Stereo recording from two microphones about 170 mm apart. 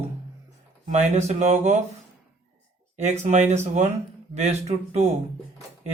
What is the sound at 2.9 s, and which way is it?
Speech, 45° right (ahead or behind).